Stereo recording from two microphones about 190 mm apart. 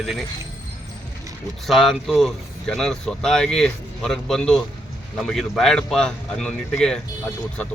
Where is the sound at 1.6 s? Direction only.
Centre (ahead or behind).